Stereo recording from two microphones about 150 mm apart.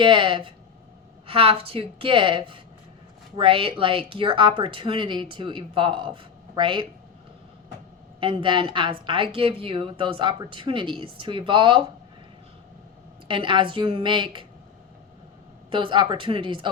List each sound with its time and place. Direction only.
0.0 s a woman's voice: 35° right (ahead or behind)
8.2 s a woman's voice: 35° right (ahead or behind)
13.2 s a woman's voice: 35° right (ahead or behind)
15.7 s a woman's voice: 35° right (ahead or behind)